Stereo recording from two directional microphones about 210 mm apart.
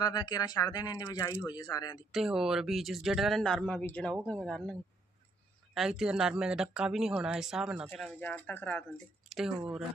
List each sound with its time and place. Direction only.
0.0 s speech: 20° left (ahead or behind)
2.1 s speech: centre (ahead or behind)